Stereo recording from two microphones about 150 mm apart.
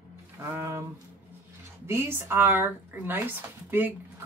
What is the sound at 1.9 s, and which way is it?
Speech, 15° right (ahead or behind).